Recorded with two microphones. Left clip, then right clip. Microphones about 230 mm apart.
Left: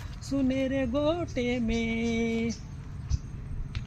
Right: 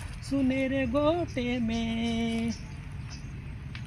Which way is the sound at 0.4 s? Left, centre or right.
Left.